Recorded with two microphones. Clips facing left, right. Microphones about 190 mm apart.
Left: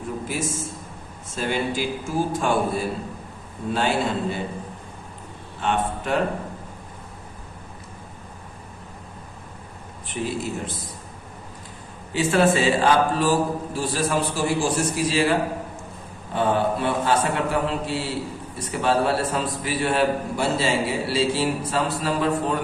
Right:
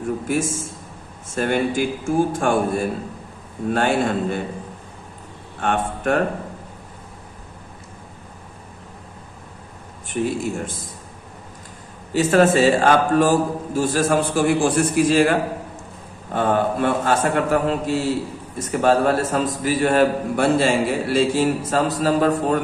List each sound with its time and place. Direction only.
0.3 s a man's voice: 50° right (ahead or behind)
5.5 s a man's voice: 50° right (ahead or behind)
10.1 s a man's voice: 50° right (ahead or behind)
12.1 s a man's voice: 45° right (ahead or behind)